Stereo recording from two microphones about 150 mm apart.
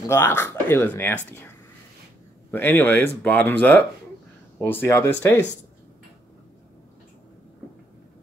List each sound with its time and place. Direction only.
0.1 s speech: 15° left (ahead or behind)
2.5 s speech: 15° left (ahead or behind)